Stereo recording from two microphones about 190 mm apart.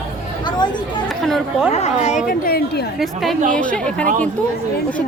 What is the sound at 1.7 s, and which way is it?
Speech, 35° left (ahead or behind).